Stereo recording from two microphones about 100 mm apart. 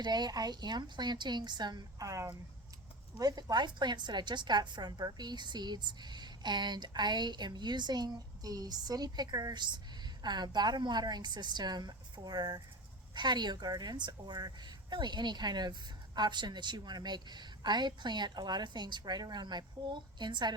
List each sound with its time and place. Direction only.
0.0 s a woman's voice: 45° right (ahead or behind)